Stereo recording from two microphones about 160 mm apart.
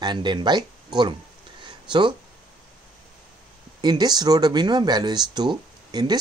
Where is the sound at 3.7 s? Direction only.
25° right (ahead or behind).